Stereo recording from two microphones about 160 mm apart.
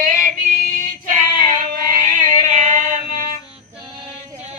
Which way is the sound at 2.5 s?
50° right (ahead or behind).